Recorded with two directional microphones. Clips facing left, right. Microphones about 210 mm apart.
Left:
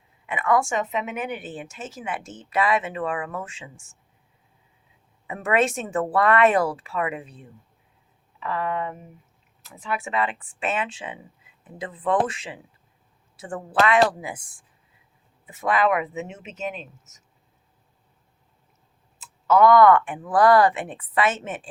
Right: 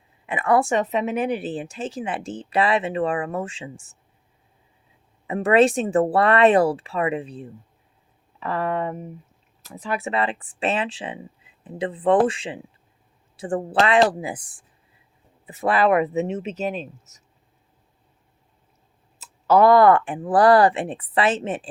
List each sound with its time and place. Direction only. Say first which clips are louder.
0.3 s speech: right 3 dB; 30° right (ahead or behind)
5.3 s speech: right 6 dB; 35° right (ahead or behind)
19.2 s speech: right 2 dB; 35° right (ahead or behind)